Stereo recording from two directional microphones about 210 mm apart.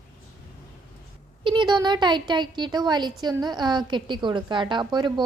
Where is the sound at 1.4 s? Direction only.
25° right (ahead or behind).